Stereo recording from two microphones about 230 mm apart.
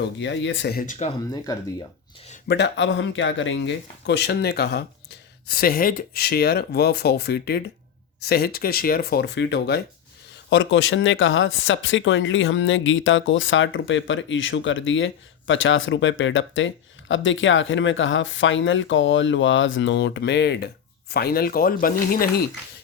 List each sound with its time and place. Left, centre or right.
0.0 s speech: left
2.5 s speech: left